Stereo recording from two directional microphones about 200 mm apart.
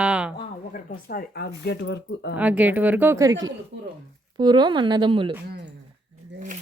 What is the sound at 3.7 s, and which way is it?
Speech, 65° right (ahead or behind).